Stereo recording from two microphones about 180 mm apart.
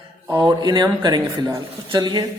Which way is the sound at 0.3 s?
25° right (ahead or behind).